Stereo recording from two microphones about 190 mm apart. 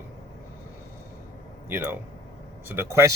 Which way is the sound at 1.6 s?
10° right (ahead or behind).